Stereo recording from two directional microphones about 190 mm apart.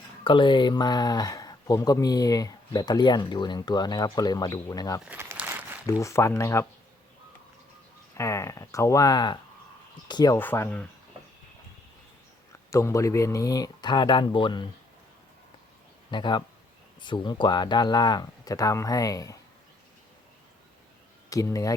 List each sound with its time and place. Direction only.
0.3 s speech: 25° left (ahead or behind)
5.0 s a sound: 10° right (ahead or behind)
5.8 s speech: 15° left (ahead or behind)
8.1 s speech: 15° left (ahead or behind)
10.3 s speech: 10° left (ahead or behind)
12.7 s speech: 15° left (ahead or behind)
16.1 s speech: 25° left (ahead or behind)
21.2 s speech: 15° left (ahead or behind)